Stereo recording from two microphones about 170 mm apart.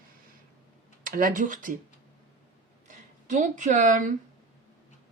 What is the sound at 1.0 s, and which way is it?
Speech, 55° right (ahead or behind).